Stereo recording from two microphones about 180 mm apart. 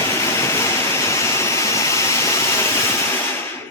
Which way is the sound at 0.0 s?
15° left (ahead or behind).